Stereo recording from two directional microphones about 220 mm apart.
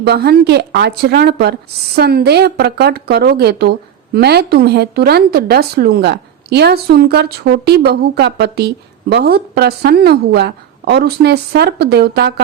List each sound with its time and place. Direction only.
0.0 s a woman's voice: 45° right (ahead or behind)